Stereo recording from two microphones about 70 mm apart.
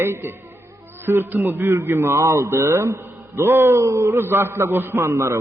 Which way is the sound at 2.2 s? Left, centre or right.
Right.